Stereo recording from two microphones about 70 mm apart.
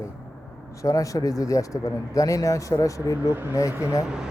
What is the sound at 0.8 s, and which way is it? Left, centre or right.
Speech, left.